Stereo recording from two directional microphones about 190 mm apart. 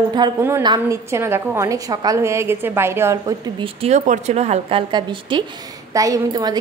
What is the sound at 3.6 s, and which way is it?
Speech, 35° right (ahead or behind).